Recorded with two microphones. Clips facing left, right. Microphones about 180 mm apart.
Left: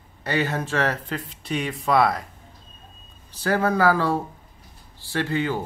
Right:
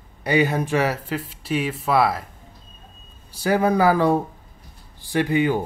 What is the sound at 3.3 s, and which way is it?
Speech, 10° right (ahead or behind).